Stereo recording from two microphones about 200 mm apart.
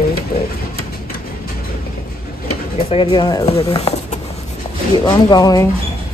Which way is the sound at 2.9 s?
25° left (ahead or behind).